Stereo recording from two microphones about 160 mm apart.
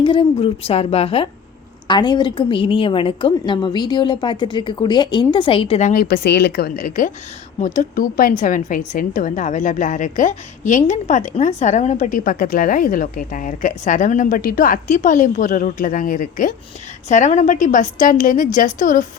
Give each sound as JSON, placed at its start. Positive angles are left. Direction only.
{"t": 0.0, "sound": "a woman's voice", "side_deg": 35}
{"t": 5.9, "sound": "a woman's voice", "side_deg": 70}